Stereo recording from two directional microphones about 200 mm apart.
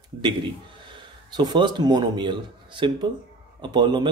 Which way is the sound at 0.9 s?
20° right (ahead or behind).